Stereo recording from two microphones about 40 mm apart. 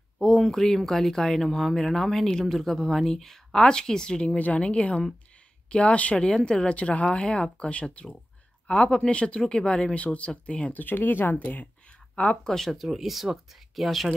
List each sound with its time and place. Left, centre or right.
0.2 s speech: centre; by 10.7 s left
10.7 s speech: left
12.2 s speech: left
12.5 s speech: centre